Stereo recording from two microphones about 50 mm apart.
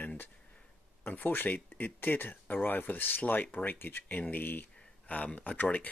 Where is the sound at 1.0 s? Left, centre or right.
Left.